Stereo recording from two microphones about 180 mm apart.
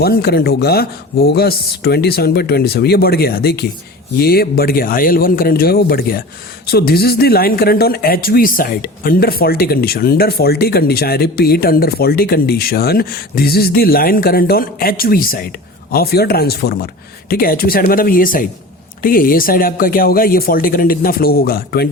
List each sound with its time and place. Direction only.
0.0 s speech: 60° left (ahead or behind)